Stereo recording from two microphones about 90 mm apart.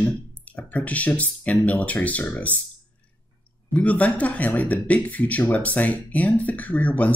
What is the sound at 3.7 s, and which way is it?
Speech, 15° left (ahead or behind).